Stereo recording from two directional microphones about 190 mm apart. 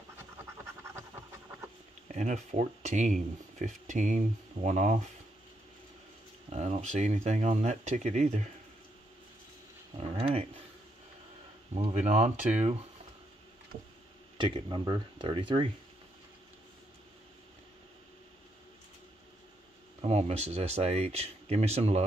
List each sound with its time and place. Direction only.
2.1 s speech: 40° right (ahead or behind)
6.5 s speech: 35° right (ahead or behind)
10.1 s a sound: 30° right (ahead or behind)
11.7 s speech: 35° right (ahead or behind)
14.4 s speech: 25° right (ahead or behind)
20.0 s speech: 35° right (ahead or behind)